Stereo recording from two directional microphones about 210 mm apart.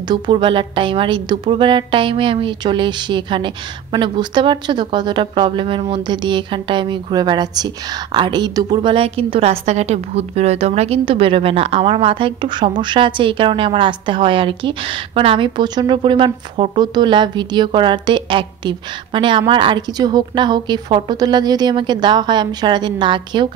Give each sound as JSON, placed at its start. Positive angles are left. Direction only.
{"t": 0.1, "sound": "a woman's voice", "side_deg": -25}